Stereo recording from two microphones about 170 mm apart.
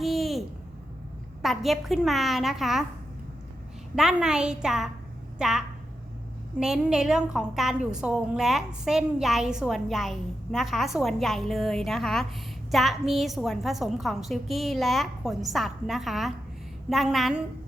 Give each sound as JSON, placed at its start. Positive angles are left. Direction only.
{"t": 0.0, "sound": "a sound", "side_deg": 0}
{"t": 1.4, "sound": "a woman's voice", "side_deg": 0}
{"t": 3.9, "sound": "a woman's voice", "side_deg": -5}